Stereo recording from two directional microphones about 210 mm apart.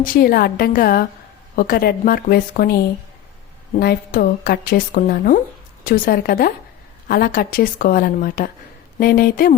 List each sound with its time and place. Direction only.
0.0 s a woman's voice: 40° left (ahead or behind)
3.8 s a woman's voice: 45° left (ahead or behind)